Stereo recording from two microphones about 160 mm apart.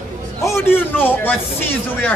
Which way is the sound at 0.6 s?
15° left (ahead or behind).